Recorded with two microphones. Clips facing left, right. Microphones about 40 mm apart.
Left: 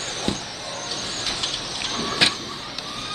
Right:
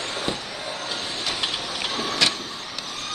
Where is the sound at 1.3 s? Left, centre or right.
Centre.